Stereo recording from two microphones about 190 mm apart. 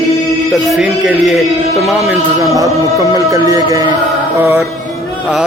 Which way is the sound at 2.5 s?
15° right (ahead or behind).